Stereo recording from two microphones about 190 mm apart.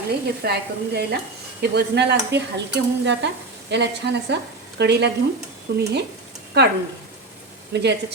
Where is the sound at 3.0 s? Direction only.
65° right (ahead or behind).